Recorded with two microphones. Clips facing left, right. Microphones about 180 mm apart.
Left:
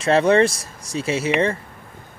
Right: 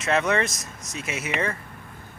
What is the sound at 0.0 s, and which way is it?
Speech, 30° left (ahead or behind).